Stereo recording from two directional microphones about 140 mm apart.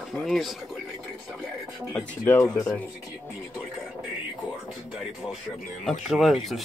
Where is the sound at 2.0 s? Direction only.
15° left (ahead or behind).